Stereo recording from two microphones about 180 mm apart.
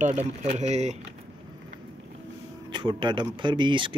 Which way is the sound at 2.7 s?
25° right (ahead or behind).